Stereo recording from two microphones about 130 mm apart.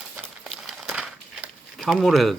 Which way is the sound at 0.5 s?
Centre (ahead or behind).